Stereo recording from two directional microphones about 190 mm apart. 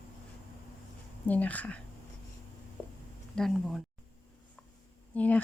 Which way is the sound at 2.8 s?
10° left (ahead or behind).